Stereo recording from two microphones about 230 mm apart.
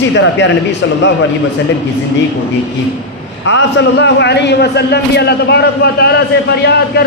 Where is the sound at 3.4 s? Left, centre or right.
Left.